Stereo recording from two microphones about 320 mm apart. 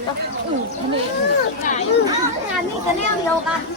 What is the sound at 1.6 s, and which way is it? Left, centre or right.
Speech, left.